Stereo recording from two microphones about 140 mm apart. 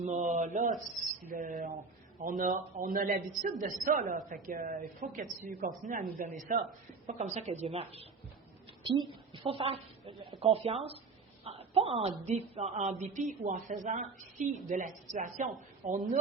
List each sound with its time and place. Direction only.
0.0 s speech: 60° right (ahead or behind)
1.2 s speech: 75° right (ahead or behind)
2.2 s a woman's voice: 70° right (ahead or behind)
7.1 s a woman's voice: 55° right (ahead or behind)